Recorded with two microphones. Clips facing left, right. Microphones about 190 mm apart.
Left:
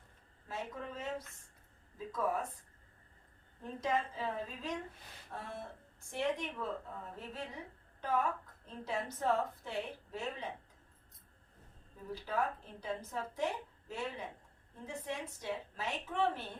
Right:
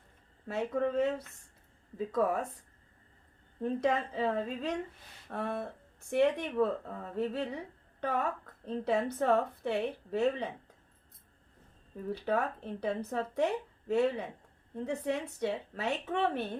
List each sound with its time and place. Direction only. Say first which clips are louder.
0.4 s speech: right 11 dB; 65° right (ahead or behind)
2.1 s speech: right 6 dB; 65° right (ahead or behind)
3.6 s speech: right 6 dB; 65° right (ahead or behind)
12.1 s speech: right 4 dB; 65° right (ahead or behind)